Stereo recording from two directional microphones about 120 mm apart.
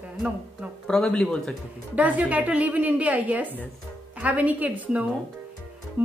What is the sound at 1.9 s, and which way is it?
A woman's voice, 10° right (ahead or behind).